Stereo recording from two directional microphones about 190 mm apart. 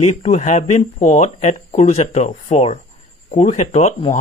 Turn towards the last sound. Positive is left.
turn(degrees=40)  # may be behind; listen again after turning